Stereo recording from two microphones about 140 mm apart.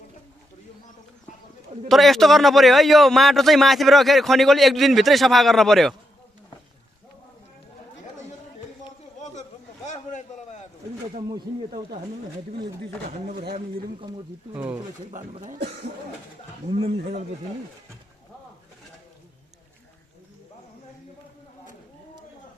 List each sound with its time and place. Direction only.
1.9 s a man's voice: centre (ahead or behind)
9.2 s a sound: 55° left (ahead or behind)
15.1 s speech: 60° right (ahead or behind)